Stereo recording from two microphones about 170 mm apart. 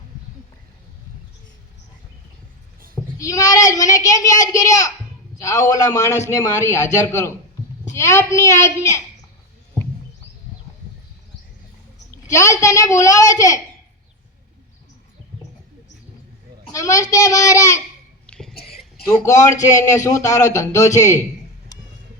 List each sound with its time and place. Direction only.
2.9 s a child's voice: 20° left (ahead or behind)
12.1 s speech: 15° left (ahead or behind)
16.7 s speech: 20° left (ahead or behind)
18.3 s cough: 5° left (ahead or behind)
18.5 s whispering: 65° left (ahead or behind)
19.1 s speech: 20° left (ahead or behind)